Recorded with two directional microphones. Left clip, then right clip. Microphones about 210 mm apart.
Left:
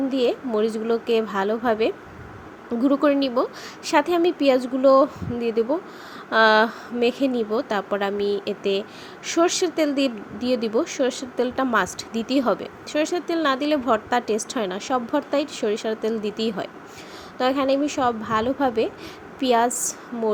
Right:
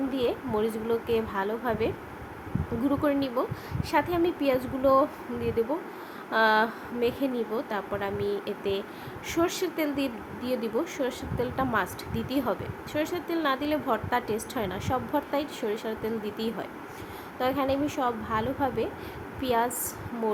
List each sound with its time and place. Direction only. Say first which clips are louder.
0.1 s speech: left 6 dB; 20° left (ahead or behind)